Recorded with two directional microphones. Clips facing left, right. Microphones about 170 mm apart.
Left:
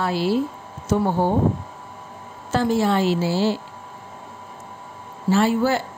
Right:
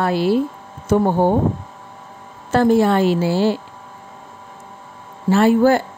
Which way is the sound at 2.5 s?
55° right (ahead or behind).